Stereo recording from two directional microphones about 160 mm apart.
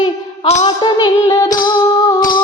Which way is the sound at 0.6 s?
25° left (ahead or behind).